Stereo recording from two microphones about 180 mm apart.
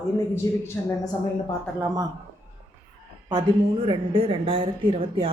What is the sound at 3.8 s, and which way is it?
Speech, 30° right (ahead or behind).